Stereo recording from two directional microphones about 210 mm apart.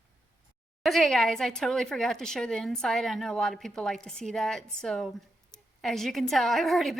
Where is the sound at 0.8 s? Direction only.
Centre (ahead or behind).